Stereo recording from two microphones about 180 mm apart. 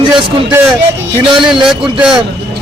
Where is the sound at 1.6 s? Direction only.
5° right (ahead or behind).